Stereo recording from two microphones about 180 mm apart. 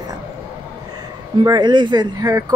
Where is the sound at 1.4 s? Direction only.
25° right (ahead or behind).